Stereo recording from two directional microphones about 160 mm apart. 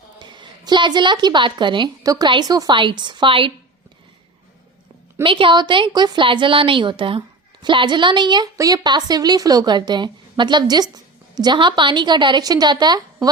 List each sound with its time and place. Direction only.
0.2 s a woman's voice: 30° right (ahead or behind)
5.2 s a woman's voice: 30° right (ahead or behind)